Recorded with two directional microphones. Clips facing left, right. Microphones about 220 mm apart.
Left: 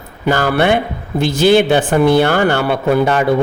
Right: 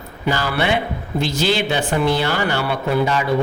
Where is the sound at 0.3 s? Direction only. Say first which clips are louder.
Left 6 dB; 50° left (ahead or behind).